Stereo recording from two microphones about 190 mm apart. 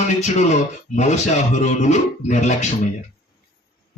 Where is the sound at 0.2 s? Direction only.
35° left (ahead or behind).